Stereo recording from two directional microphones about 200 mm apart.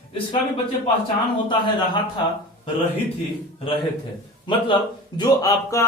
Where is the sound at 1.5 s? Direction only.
25° left (ahead or behind).